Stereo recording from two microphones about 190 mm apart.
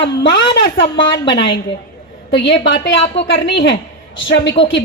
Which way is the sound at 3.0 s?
30° left (ahead or behind).